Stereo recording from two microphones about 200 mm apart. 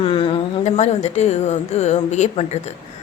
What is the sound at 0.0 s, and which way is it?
A woman's voice, 25° left (ahead or behind).